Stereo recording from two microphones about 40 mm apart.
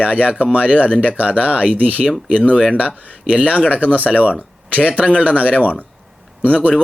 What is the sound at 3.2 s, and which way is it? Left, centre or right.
Speech, right.